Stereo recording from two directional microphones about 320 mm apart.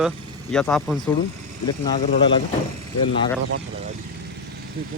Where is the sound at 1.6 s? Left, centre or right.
Centre.